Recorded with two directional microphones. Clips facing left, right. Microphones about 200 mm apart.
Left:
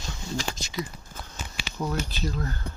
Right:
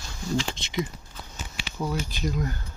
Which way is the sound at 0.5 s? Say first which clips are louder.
Right 3 dB; 25° right (ahead or behind).